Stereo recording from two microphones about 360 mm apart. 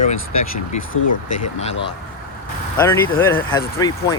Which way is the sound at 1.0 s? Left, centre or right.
Left.